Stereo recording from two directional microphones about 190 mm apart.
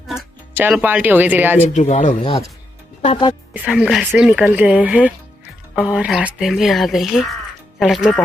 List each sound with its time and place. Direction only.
0.1 s speech: 5° right (ahead or behind)
1.7 s speech: 35° left (ahead or behind)
3.0 s speech: 30° left (ahead or behind)
3.5 s speech: 5° right (ahead or behind)